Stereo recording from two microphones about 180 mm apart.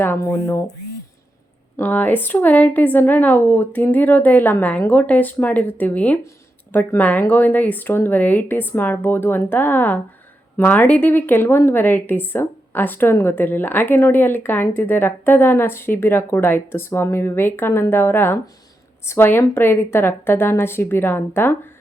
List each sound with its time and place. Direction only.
0.0 s a woman's voice: 15° left (ahead or behind)
1.7 s a woman's voice: 10° left (ahead or behind)